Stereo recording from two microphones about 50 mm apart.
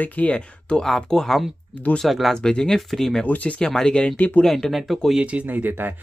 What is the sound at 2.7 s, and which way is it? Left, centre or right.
Speech, centre.